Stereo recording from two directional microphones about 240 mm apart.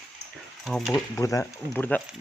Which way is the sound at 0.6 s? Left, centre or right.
Centre.